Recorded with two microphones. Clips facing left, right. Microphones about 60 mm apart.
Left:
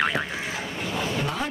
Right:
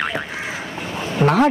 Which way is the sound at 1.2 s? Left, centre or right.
Right.